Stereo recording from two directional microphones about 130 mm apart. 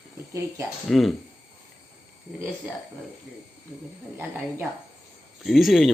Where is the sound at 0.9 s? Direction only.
Centre (ahead or behind).